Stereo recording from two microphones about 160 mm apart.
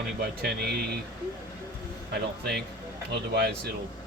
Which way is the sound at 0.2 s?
90° right.